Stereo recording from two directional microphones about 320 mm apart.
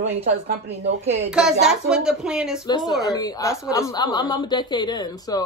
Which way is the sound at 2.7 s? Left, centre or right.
Centre.